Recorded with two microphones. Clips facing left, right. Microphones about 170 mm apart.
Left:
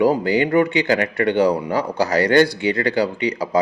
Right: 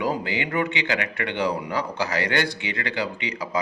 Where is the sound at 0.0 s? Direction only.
35° left (ahead or behind).